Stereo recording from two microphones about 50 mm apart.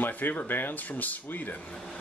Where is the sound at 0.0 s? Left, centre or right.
Left.